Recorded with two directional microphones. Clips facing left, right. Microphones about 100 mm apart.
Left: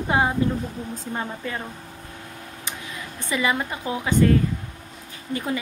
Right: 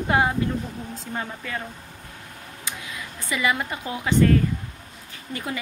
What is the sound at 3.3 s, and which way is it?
Speech, 25° left (ahead or behind).